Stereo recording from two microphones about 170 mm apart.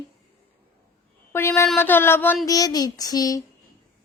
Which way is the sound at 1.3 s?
15° left (ahead or behind).